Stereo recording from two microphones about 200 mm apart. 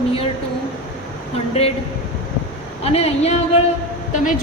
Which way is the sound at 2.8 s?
30° left (ahead or behind).